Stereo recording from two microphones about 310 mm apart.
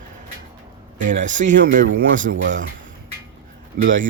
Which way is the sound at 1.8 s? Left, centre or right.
Right.